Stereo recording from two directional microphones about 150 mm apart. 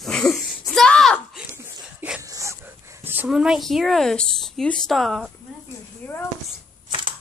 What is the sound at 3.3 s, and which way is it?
Speech, 5° right (ahead or behind).